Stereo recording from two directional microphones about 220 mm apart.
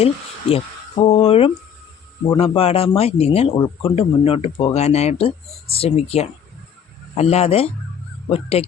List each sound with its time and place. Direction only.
0.5 s speech: 25° left (ahead or behind)